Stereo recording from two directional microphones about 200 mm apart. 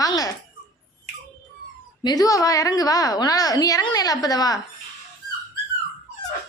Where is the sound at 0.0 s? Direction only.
20° left (ahead or behind).